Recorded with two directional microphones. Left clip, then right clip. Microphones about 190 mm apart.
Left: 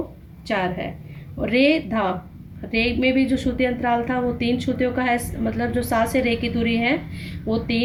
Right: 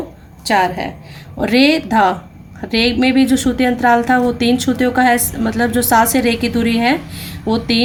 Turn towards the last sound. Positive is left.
turn(degrees=-50)  # may be behind; listen again after turning